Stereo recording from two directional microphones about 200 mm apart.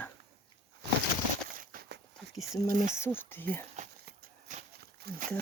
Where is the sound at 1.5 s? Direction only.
45° right (ahead or behind).